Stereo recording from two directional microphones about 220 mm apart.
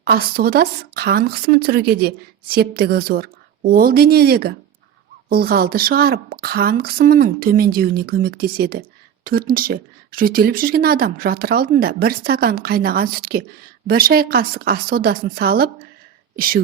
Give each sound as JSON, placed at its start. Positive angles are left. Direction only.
{"t": 0.0, "sound": "speech", "side_deg": -45}